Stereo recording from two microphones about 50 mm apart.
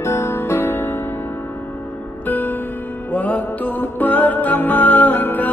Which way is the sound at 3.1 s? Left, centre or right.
Left.